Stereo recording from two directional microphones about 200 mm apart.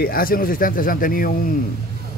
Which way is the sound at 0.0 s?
45° left (ahead or behind).